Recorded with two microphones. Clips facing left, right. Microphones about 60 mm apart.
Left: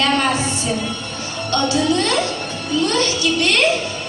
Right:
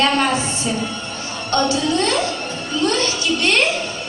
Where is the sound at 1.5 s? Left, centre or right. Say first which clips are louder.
Right 1 dB; right.